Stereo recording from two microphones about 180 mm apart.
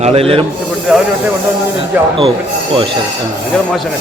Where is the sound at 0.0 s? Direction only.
35° right (ahead or behind).